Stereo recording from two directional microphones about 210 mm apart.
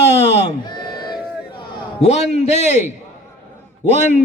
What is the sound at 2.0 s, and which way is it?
Speech, 30° left (ahead or behind).